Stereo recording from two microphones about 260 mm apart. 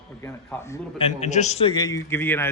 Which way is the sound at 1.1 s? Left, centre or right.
Left.